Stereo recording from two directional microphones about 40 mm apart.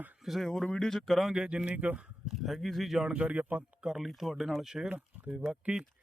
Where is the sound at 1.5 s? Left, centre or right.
Right.